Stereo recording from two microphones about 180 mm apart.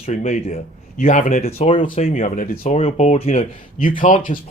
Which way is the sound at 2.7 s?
40° left (ahead or behind).